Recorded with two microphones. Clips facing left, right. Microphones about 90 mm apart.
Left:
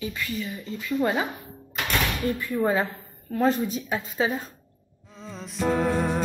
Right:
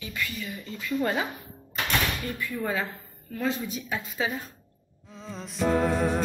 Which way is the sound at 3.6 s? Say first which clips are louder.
Left 4 dB; 40° left (ahead or behind).